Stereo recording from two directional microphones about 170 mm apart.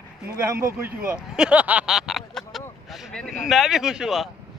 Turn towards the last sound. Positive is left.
turn(degrees=-5)  # may be behind; listen again after turning